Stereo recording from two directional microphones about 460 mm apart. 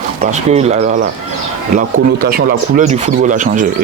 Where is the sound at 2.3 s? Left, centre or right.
Centre.